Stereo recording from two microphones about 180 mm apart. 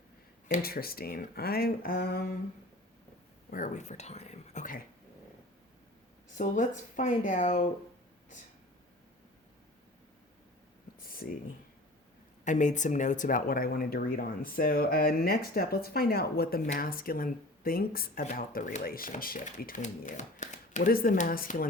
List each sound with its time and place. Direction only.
0.6 s speech: 55° left (ahead or behind)
3.5 s speech: 45° left (ahead or behind)
6.3 s speech: 45° left (ahead or behind)
11.0 s a sound: 55° left (ahead or behind)
12.5 s speech: 45° left (ahead or behind)